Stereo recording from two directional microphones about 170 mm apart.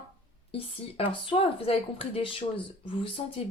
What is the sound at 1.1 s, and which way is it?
A woman's voice, 30° left (ahead or behind).